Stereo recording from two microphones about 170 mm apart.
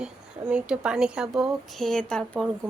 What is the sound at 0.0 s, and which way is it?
Speech, 5° right (ahead or behind).